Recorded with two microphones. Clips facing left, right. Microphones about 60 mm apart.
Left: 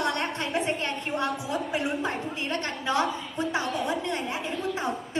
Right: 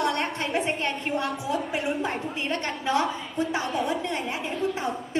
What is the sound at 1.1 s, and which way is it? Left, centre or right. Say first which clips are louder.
Speech: left 1 dB; left.